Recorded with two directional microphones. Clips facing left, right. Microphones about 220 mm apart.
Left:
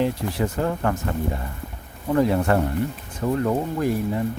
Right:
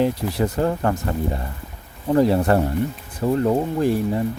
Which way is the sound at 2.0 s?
30° right (ahead or behind).